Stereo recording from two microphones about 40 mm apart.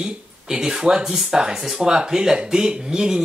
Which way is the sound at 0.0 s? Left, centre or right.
Centre.